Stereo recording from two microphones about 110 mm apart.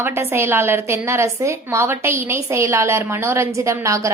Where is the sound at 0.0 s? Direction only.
20° right (ahead or behind).